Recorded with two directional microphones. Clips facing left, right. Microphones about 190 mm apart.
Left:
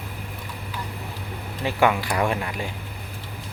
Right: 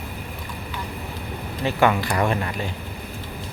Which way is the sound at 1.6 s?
10° left (ahead or behind).